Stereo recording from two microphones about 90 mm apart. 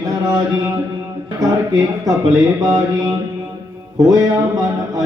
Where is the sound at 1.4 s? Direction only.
40° right (ahead or behind).